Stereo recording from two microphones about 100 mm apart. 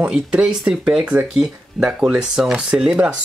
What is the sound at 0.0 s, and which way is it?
Speech, 10° right (ahead or behind).